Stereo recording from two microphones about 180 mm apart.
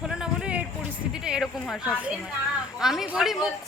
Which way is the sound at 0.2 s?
5° right (ahead or behind).